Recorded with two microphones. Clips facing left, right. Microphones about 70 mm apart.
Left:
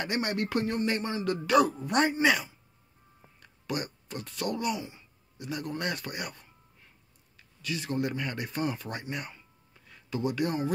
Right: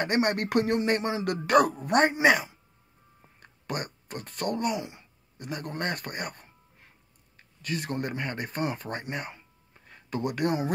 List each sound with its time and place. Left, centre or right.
0.0 s a man's voice: right
9.8 s music: right